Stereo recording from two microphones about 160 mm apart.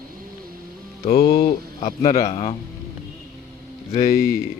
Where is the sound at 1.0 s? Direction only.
35° left (ahead or behind).